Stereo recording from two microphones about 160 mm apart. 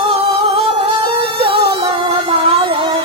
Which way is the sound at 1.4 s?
35° right (ahead or behind).